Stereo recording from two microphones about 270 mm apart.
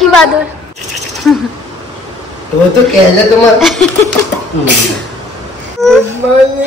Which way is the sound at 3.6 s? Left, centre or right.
Centre.